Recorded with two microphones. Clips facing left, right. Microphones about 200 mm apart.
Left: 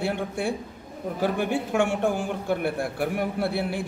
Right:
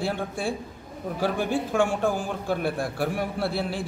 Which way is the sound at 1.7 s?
70° left (ahead or behind).